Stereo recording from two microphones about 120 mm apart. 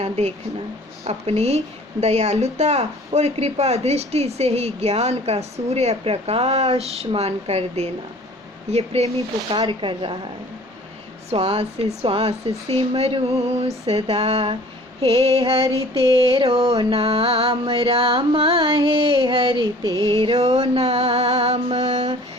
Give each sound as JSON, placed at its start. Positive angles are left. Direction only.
{"t": 0.0, "sound": "a woman's voice", "side_deg": -65}
{"t": 9.6, "sound": "music", "side_deg": -45}
{"t": 11.3, "sound": "a woman's voice", "side_deg": -55}
{"t": 16.0, "sound": "music", "side_deg": -50}
{"t": 20.0, "sound": "a woman's voice", "side_deg": -50}